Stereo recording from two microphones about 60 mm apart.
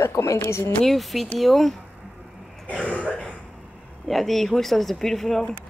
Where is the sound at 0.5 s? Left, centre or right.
Left.